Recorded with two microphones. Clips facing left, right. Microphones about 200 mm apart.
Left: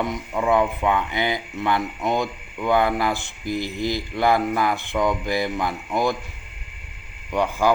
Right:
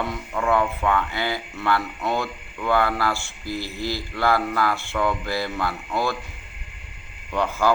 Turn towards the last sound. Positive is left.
turn(degrees=15)  # may be behind; listen again after turning